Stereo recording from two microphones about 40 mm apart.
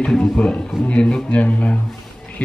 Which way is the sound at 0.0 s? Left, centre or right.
Centre.